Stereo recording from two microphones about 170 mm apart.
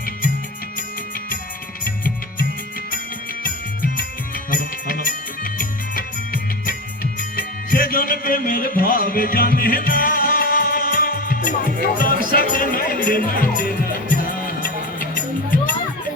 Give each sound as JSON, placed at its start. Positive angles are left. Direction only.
{"t": 1.8, "sound": "music", "side_deg": 55}
{"t": 4.5, "sound": "music", "side_deg": 55}
{"t": 11.9, "sound": "speech", "side_deg": 55}
{"t": 14.2, "sound": "music", "side_deg": 55}